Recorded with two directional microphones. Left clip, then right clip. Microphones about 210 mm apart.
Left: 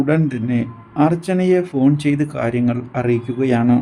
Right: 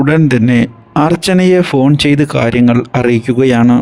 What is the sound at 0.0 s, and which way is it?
A man's voice, 45° right (ahead or behind).